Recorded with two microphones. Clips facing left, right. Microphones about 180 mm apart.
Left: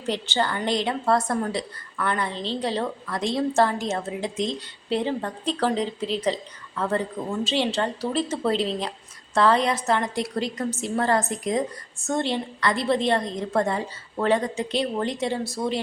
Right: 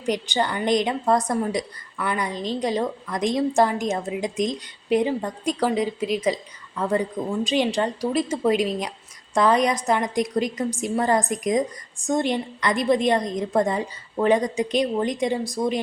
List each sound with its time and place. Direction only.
0.0 s a woman's voice: 15° right (ahead or behind)